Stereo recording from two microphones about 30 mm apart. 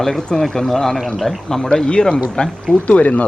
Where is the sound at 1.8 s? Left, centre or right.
Left.